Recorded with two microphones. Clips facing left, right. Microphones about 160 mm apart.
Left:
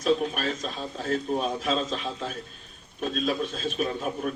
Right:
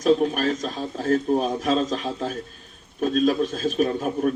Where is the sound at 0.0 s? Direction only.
45° right (ahead or behind).